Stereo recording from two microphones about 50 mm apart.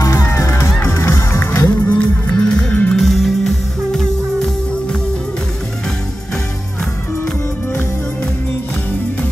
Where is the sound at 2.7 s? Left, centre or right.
Left.